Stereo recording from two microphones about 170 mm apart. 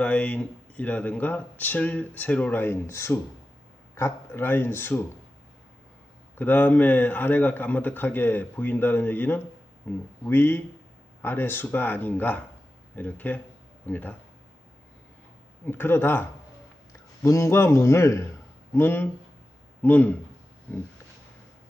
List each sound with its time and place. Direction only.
0.0 s speech: 10° left (ahead or behind)
6.3 s speech: 10° left (ahead or behind)
15.6 s speech: 10° left (ahead or behind)
17.2 s speech: 15° left (ahead or behind)
20.7 s a sound: 10° left (ahead or behind)